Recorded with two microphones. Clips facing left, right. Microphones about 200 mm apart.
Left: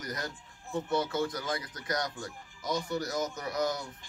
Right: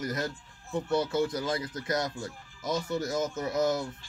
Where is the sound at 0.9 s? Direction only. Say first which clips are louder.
Right 4 dB; 20° right (ahead or behind).